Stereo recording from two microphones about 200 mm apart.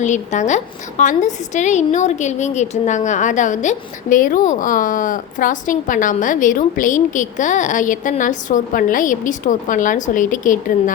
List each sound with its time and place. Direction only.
0.0 s a woman's voice: 35° left (ahead or behind)